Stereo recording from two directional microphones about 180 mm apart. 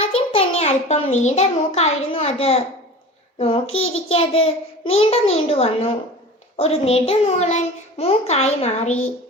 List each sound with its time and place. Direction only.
0.1 s a child's voice: 35° left (ahead or behind)